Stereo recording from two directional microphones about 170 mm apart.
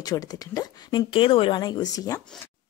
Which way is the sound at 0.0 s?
20° left (ahead or behind).